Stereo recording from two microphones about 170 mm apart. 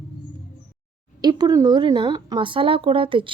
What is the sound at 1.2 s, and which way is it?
A woman's voice, 25° right (ahead or behind).